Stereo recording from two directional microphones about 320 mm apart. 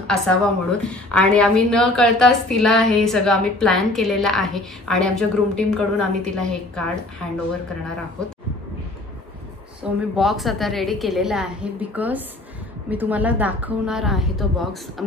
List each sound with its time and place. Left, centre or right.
0.0 s a woman's voice: centre
9.8 s a woman's voice: centre